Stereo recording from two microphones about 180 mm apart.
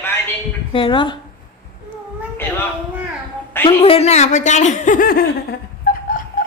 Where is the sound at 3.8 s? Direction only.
35° left (ahead or behind); by 5.6 s 55° left (ahead or behind).